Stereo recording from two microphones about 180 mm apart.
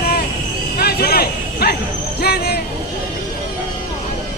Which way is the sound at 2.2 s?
60° left (ahead or behind).